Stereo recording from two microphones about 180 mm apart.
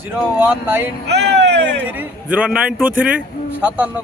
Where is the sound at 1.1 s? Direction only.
70° right (ahead or behind).